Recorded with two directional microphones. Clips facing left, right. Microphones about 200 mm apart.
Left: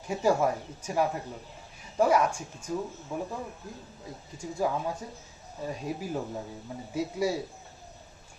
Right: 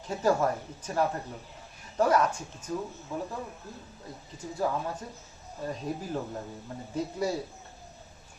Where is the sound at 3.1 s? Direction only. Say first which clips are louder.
Left 1 dB; 20° left (ahead or behind).